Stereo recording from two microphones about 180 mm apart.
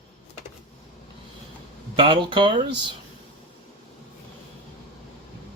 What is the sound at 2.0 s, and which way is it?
Speech, 30° right (ahead or behind).